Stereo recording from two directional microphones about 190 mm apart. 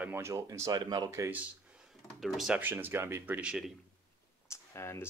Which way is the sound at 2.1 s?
Centre (ahead or behind).